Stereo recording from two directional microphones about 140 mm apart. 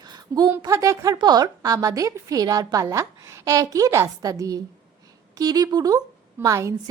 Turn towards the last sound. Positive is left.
turn(degrees=-20)  # may be behind; listen again after turning